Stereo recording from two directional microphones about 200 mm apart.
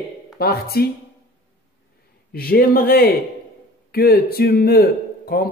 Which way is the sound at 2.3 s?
50° left (ahead or behind).